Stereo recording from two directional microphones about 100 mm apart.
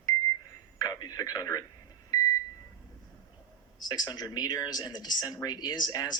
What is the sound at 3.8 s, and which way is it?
Speech, 40° left (ahead or behind).